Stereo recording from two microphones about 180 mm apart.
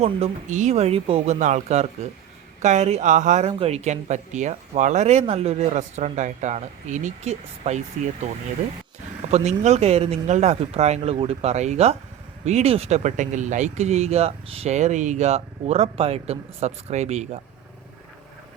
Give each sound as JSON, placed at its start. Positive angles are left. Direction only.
{"t": 0.0, "sound": "speech", "side_deg": -40}